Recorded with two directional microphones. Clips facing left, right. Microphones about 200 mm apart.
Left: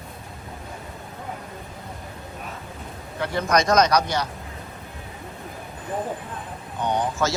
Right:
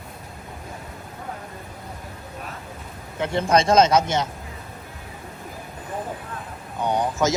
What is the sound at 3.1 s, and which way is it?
Speech, 20° right (ahead or behind).